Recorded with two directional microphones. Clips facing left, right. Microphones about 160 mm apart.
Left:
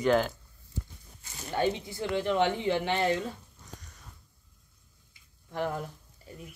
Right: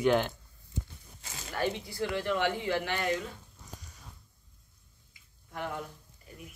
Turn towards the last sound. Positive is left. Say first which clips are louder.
# left 5 dB
turn(degrees=40)  # may be behind; listen again after turning